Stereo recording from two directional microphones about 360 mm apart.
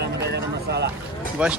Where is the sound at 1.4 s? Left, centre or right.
Centre.